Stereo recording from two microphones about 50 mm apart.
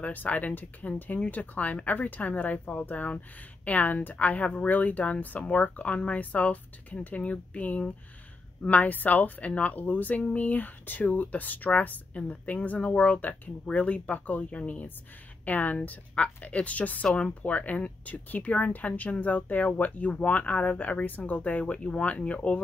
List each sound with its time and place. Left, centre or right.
0.0 s speech: left